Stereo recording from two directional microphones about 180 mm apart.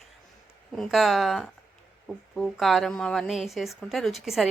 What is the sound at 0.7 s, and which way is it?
A woman's voice, centre (ahead or behind).